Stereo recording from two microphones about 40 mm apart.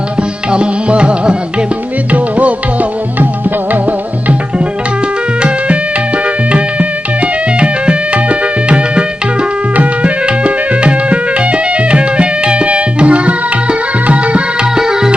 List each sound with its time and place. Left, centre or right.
0.2 s tabla: right
2.1 s music: right
6.5 s music: right
14.8 s music: centre